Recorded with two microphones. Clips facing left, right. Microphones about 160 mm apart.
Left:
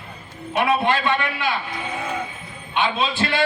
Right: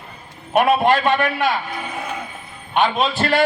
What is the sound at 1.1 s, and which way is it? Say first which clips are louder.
Speech: right 5 dB; 45° right (ahead or behind).